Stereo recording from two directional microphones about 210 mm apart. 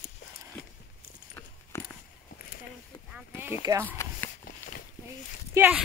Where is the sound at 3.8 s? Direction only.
10° left (ahead or behind).